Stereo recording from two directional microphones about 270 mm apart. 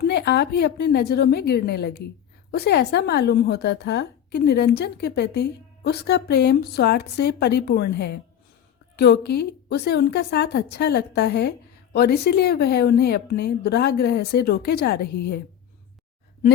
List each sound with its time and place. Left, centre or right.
0.0 s a woman's voice: left